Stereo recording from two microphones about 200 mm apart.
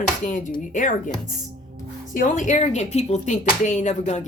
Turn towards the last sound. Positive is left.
turn(degrees=35)  # may be behind; listen again after turning